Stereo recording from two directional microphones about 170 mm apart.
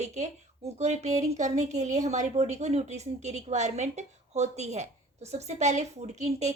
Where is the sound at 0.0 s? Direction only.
45° right (ahead or behind).